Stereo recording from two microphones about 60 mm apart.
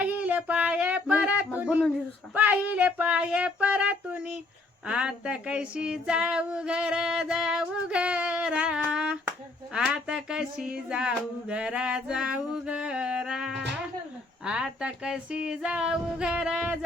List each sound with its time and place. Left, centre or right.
0.0 s female singing: right
2.3 s music: right
4.9 s female singing: centre